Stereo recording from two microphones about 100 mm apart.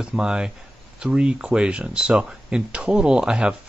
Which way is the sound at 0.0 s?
5° right (ahead or behind).